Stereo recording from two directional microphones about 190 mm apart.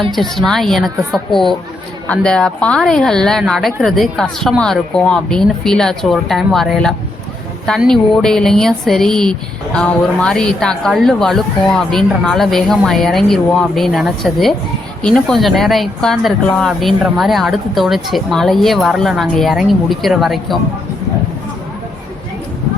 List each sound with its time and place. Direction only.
0.4 s speech: centre (ahead or behind)